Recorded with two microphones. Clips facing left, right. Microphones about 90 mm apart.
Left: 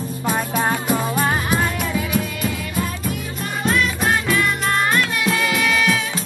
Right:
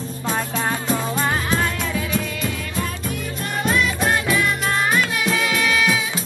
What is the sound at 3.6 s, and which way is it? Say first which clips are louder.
Music: left 1 dB; centre (ahead or behind).